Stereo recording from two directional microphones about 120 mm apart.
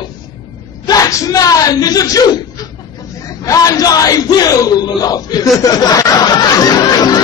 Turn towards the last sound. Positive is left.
turn(degrees=35)  # may be behind; listen again after turning